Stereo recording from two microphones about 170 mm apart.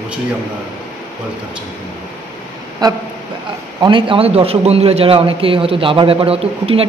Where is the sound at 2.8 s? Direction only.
20° right (ahead or behind).